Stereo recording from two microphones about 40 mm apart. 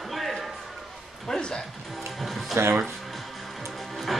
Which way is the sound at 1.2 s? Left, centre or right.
Centre.